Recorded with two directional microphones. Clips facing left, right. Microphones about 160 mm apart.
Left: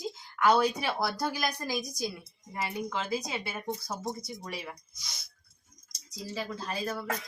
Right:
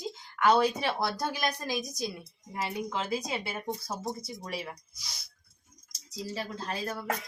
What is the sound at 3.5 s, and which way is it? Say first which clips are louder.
Speech: even; centre (ahead or behind).